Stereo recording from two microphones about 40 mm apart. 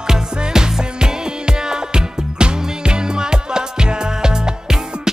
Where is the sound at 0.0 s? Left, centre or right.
Centre.